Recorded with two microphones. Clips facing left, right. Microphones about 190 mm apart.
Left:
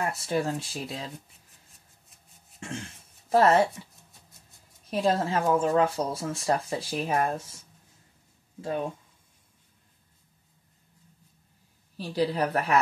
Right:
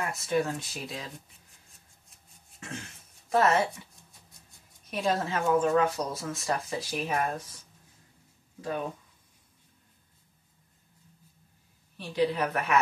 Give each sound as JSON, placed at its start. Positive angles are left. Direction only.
{"t": 0.0, "sound": "speech", "side_deg": 30}
{"t": 2.6, "sound": "speech", "side_deg": 30}
{"t": 4.8, "sound": "speech", "side_deg": 30}
{"t": 8.5, "sound": "speech", "side_deg": 25}
{"t": 12.0, "sound": "a woman's voice", "side_deg": 35}